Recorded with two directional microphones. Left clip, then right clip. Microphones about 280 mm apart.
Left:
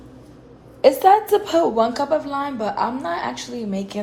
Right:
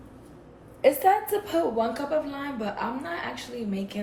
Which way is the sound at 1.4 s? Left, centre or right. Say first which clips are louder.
Left 8 dB; left.